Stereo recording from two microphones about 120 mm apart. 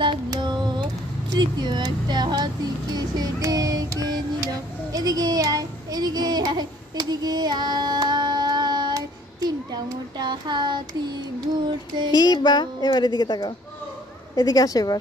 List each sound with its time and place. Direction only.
0.0 s music: 40° right (ahead or behind)
4.9 s child singing: 30° right (ahead or behind)
12.1 s speech: 35° left (ahead or behind)